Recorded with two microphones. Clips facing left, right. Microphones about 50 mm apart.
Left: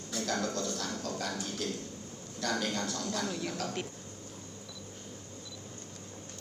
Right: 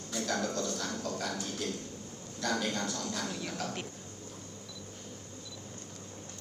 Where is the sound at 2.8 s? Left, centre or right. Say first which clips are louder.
Left 1 dB; right.